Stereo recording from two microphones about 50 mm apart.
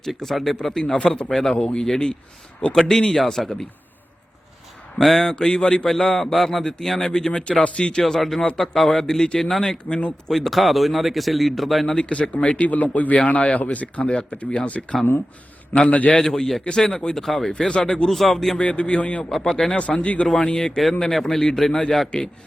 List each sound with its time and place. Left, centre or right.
0.0 s speech: centre
0.7 s speech: centre
4.9 s speech: centre
5.9 s speech: centre
8.0 s speech: centre
10.3 s speech: centre
11.9 s speech: left
16.1 s speech: centre
18.5 s speech: left
19.3 s speech: centre
19.8 s speech: left